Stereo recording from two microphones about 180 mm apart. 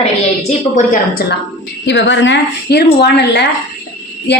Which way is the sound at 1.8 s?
80° left.